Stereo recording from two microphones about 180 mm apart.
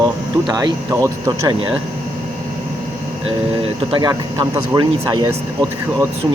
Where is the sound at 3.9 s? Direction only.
25° right (ahead or behind).